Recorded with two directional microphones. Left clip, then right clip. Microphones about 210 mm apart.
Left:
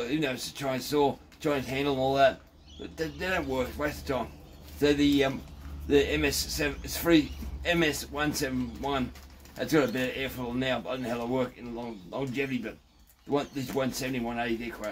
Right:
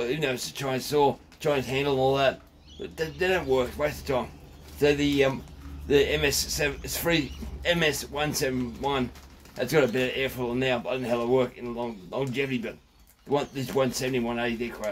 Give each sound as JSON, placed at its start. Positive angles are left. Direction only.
{"t": 0.0, "sound": "a man's voice", "side_deg": -30}